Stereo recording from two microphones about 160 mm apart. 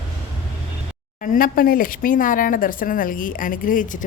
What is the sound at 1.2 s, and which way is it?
A woman's voice, 60° left (ahead or behind).